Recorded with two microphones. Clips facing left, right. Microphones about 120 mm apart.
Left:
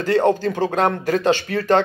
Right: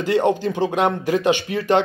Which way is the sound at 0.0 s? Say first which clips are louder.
Left 1 dB; 20° right (ahead or behind).